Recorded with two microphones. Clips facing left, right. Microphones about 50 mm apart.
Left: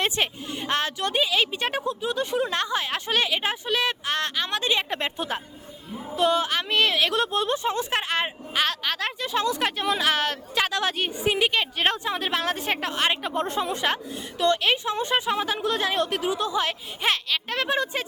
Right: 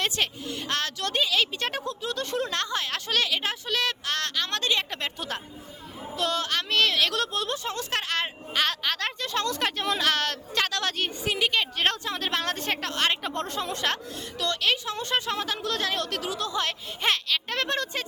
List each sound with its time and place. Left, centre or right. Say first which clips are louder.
0.0 s a woman's voice: left 2 dB; left
8.6 s a woman's voice: left 1 dB; centre